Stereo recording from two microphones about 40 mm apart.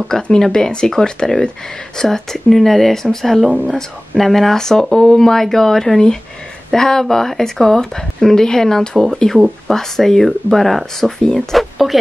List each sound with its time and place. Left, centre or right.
0.1 s speech: centre
3.4 s speech: right
4.2 s speech: centre